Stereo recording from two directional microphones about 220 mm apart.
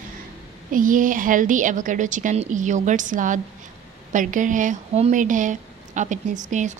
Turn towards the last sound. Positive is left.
turn(degrees=-35)  # may be behind; listen again after turning